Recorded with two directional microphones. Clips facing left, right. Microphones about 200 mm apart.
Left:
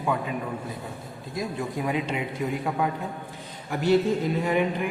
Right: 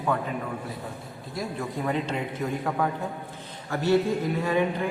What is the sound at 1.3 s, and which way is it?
Speech, 15° left (ahead or behind).